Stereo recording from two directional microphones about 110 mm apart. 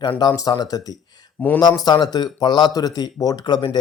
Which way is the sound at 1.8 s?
40° left (ahead or behind).